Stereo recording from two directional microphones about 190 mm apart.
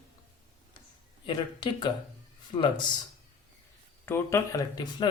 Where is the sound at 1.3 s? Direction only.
25° left (ahead or behind).